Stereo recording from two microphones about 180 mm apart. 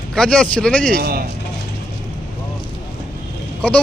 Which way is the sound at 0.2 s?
5° left (ahead or behind).